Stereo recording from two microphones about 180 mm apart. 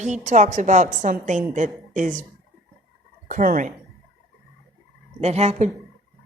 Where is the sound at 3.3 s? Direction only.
50° right (ahead or behind).